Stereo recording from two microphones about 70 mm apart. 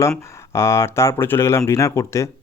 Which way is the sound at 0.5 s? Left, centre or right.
Left.